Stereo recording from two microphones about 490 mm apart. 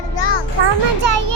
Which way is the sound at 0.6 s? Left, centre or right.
Right.